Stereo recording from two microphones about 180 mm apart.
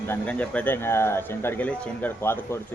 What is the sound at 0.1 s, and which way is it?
Speech, 5° left (ahead or behind).